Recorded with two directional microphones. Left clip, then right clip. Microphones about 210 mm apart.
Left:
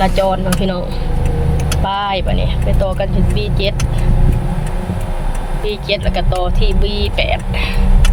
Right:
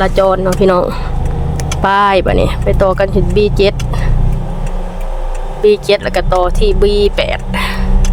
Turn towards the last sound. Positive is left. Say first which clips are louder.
# right 2 dB
turn(degrees=-30)  # may be behind; listen again after turning